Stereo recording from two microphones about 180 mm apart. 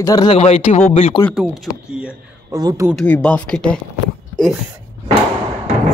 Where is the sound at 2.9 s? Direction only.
5° left (ahead or behind).